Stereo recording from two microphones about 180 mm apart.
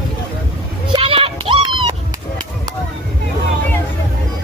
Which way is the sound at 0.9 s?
30° right (ahead or behind).